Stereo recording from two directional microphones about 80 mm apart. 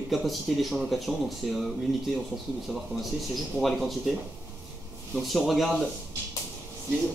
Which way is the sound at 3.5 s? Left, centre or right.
Centre.